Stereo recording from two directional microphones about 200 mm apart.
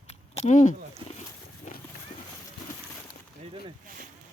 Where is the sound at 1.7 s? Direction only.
40° left (ahead or behind).